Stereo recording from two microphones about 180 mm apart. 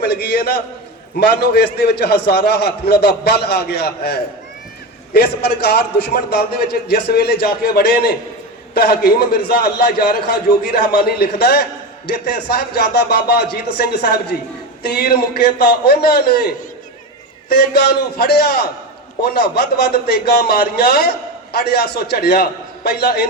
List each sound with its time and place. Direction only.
0.0 s a man's voice: 60° left (ahead or behind)